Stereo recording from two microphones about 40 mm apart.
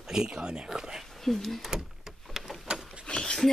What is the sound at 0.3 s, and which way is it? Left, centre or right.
Speech, right.